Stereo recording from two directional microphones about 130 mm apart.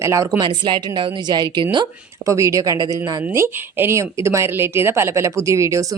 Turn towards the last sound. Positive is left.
turn(degrees=-25)  # may be behind; listen again after turning